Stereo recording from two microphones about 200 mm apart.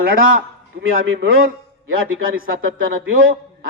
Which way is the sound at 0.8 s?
65° right (ahead or behind).